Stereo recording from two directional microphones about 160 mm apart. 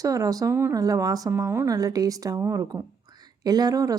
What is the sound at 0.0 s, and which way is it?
A woman's voice, 20° right (ahead or behind).